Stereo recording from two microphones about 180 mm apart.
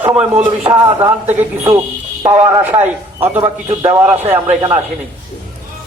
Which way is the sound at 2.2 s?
15° right (ahead or behind).